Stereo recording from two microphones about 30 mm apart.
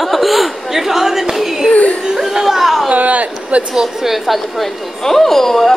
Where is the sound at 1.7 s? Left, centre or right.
Left.